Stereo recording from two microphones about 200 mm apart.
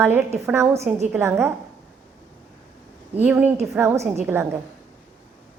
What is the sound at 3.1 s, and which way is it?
A woman's voice, 10° right (ahead or behind).